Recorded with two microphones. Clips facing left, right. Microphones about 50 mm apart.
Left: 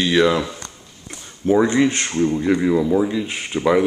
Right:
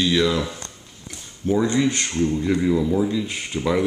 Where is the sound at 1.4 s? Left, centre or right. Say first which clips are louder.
Left 4 dB; left.